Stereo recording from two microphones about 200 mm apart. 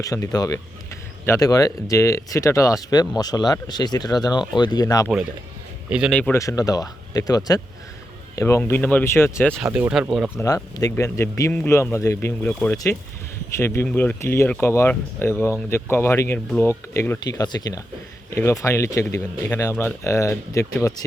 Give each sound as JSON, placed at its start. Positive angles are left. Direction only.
{"t": 0.0, "sound": "speech", "side_deg": 15}
{"t": 5.0, "sound": "speech", "side_deg": -5}
{"t": 6.1, "sound": "speech", "side_deg": 10}
{"t": 9.6, "sound": "speech", "side_deg": -10}
{"t": 10.3, "sound": "speech", "side_deg": 15}
{"t": 12.7, "sound": "speech", "side_deg": 15}